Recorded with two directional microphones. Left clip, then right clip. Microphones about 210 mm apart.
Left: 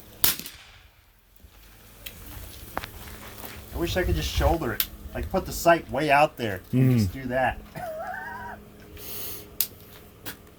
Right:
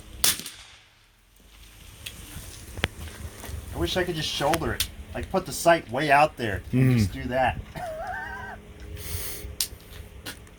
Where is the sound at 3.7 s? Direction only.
15° left (ahead or behind).